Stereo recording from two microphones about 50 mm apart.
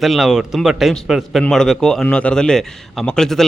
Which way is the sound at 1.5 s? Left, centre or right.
Centre.